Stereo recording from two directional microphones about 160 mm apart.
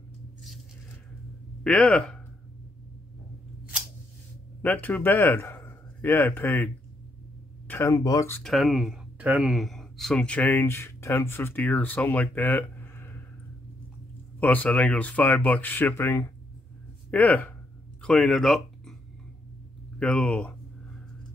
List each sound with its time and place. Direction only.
1.6 s speech: 5° left (ahead or behind)
4.8 s speech: 10° left (ahead or behind)
8.4 s speech: centre (ahead or behind)
14.4 s speech: 10° left (ahead or behind)
20.0 s speech: 5° left (ahead or behind)